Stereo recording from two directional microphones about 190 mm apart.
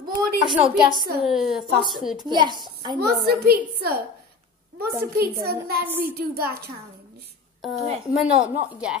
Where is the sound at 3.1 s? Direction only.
55° right (ahead or behind).